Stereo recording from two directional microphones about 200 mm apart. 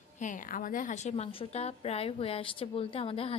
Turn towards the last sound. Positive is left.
turn(degrees=30)  # may be behind; listen again after turning